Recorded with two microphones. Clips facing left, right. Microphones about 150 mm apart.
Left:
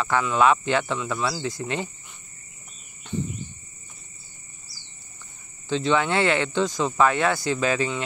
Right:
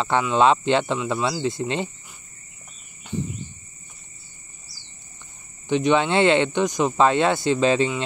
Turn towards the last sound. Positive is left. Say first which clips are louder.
# right 5 dB
turn(degrees=-25)  # may be behind; listen again after turning